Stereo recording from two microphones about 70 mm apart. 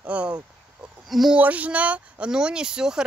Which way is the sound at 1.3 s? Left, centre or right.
Right.